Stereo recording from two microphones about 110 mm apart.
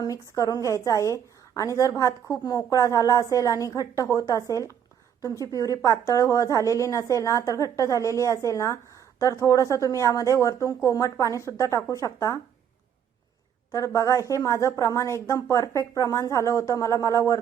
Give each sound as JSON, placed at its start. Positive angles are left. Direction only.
{"t": 0.0, "sound": "a woman's voice", "side_deg": 30}
{"t": 13.7, "sound": "a woman's voice", "side_deg": 30}